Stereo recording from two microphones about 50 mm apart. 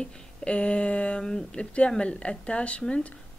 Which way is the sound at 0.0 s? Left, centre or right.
Left.